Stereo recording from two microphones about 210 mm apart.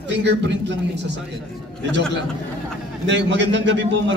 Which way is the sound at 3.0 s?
55° right (ahead or behind).